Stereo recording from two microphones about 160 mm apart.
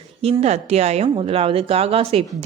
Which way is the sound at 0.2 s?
40° right (ahead or behind).